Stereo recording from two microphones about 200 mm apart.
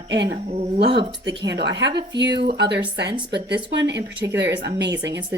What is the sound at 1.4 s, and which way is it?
Speech, 60° right (ahead or behind).